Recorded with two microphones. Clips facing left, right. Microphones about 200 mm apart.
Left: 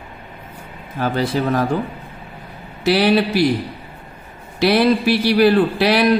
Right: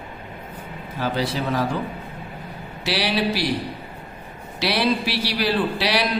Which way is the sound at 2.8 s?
50° left (ahead or behind).